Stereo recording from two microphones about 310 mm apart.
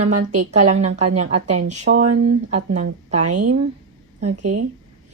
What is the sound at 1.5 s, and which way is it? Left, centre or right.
Speech, right.